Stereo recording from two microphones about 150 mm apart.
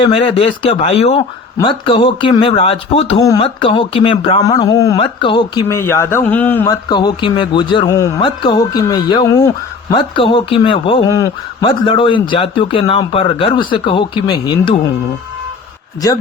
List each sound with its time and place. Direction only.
0.0 s a man's voice: 35° left (ahead or behind)
4.4 s a man's voice: 25° left (ahead or behind)
4.9 s a man's voice: 35° left (ahead or behind)
5.6 s speech: 15° left (ahead or behind)
6.7 s a man's voice: 30° left (ahead or behind)
8.2 s a man's voice: 30° left (ahead or behind)